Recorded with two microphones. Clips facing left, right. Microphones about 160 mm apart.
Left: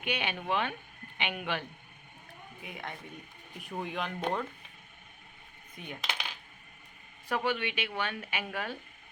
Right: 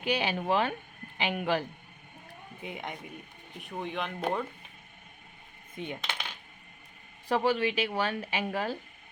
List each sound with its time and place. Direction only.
0.0 s speech: 35° right (ahead or behind)
2.6 s speech: 20° right (ahead or behind)
3.6 s speech: centre (ahead or behind)
5.7 s coin: 20° right (ahead or behind)
7.3 s speech: 35° right (ahead or behind)